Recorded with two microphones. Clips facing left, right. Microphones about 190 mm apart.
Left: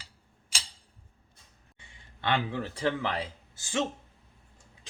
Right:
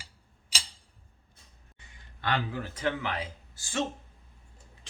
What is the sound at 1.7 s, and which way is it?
Speech, 25° left (ahead or behind).